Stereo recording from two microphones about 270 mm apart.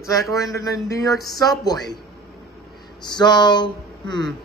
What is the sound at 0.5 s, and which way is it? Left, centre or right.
Speech, centre.